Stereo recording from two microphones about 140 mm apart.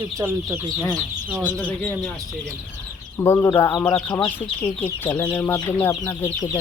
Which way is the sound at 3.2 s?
20° left (ahead or behind).